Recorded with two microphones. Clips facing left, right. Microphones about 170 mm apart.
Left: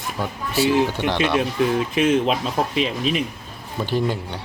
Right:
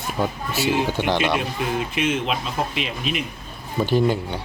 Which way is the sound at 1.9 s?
35° left (ahead or behind).